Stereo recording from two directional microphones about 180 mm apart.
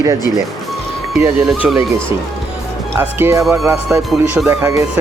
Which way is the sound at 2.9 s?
15° right (ahead or behind).